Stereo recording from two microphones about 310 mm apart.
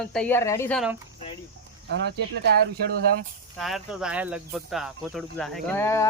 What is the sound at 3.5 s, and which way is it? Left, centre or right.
Speech, centre.